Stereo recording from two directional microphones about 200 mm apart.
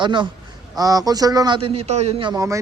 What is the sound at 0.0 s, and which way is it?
A man's voice, 25° right (ahead or behind).